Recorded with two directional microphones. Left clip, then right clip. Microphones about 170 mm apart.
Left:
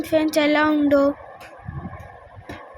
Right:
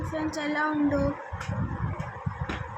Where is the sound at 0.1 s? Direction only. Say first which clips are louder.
Left 13 dB; 50° left (ahead or behind).